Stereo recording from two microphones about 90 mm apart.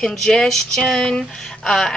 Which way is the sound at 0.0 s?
5° left (ahead or behind).